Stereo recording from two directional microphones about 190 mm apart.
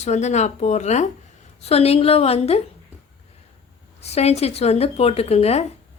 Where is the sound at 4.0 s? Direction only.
35° left (ahead or behind).